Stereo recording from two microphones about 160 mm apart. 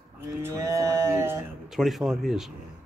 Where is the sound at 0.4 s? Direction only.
20° right (ahead or behind).